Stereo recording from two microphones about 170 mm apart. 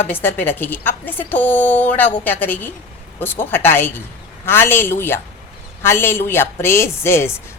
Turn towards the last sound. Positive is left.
turn(degrees=15)  # may be behind; listen again after turning